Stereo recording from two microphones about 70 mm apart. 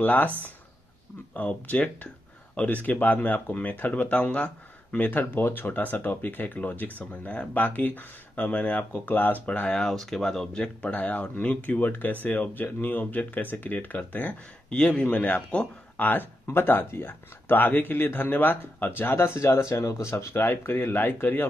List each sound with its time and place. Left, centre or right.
0.0 s speech: left
1.3 s speech: left
9.8 s speech: centre; by 14.3 s left
14.7 s speech: centre
15.0 s speech: left